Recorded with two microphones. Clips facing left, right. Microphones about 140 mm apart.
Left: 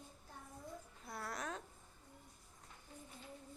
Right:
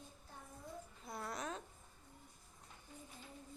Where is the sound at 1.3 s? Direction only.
10° right (ahead or behind).